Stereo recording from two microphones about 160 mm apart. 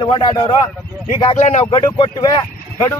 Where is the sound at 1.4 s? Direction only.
45° left (ahead or behind).